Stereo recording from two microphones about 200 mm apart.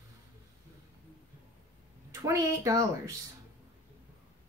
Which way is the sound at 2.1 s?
15° right (ahead or behind).